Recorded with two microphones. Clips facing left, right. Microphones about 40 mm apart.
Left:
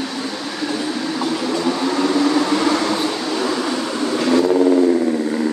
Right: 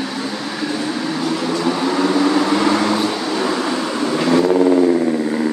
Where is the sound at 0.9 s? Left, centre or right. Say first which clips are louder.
Right 1 dB; centre.